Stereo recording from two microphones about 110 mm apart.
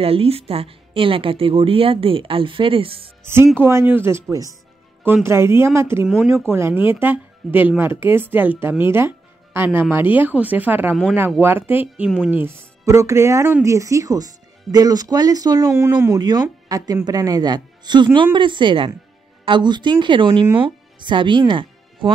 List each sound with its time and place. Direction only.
0.0 s speech: 60° right (ahead or behind)
3.5 s speech: 20° right (ahead or behind); by 22.1 s 45° right (ahead or behind)